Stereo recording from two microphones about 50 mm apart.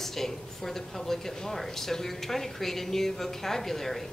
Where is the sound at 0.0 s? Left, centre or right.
Centre.